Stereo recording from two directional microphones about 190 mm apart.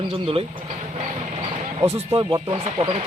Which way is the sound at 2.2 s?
20° right (ahead or behind).